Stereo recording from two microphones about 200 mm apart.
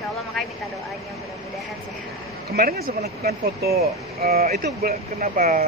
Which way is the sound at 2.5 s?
50° right (ahead or behind).